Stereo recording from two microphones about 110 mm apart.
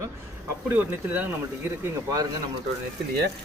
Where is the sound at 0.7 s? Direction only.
15° right (ahead or behind).